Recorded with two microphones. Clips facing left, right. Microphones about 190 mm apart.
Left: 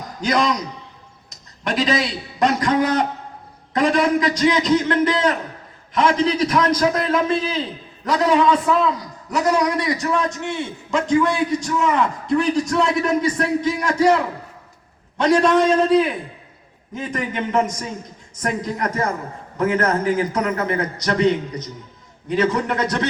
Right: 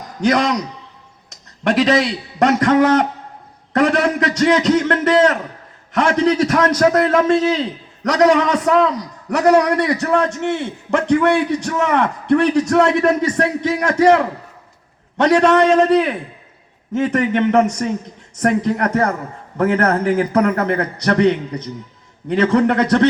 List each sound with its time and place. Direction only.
0.2 s a man's voice: 70° right (ahead or behind)
15.2 s a man's voice: 70° right (ahead or behind)